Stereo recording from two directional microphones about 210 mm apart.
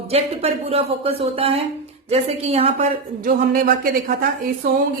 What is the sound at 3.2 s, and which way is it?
Speech, 45° right (ahead or behind).